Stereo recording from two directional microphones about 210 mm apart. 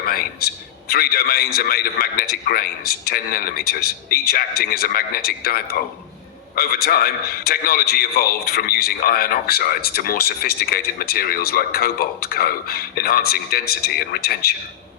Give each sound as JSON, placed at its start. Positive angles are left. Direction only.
{"t": 0.9, "sound": "speech", "side_deg": 45}
{"t": 6.8, "sound": "speech", "side_deg": 45}